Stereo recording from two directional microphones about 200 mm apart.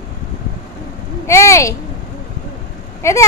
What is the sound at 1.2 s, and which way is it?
Speech, 15° left (ahead or behind).